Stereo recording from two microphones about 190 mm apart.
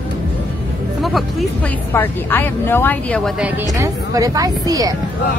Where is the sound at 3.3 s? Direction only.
10° right (ahead or behind).